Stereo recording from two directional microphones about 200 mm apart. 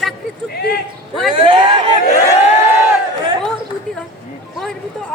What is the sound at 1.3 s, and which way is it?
Speech, 25° right (ahead or behind).